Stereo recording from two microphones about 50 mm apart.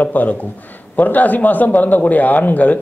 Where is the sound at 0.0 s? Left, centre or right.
Left.